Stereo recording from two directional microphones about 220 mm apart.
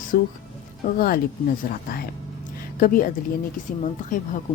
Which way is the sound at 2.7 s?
40° left (ahead or behind).